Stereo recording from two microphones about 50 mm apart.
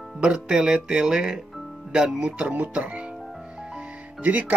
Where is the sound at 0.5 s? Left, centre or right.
Centre.